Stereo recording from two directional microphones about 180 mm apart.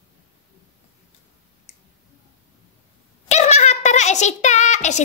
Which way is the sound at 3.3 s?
40° left (ahead or behind).